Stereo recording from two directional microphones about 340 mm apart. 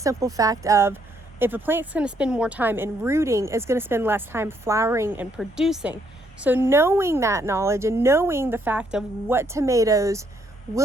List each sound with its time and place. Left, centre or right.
0.0 s a woman's voice: centre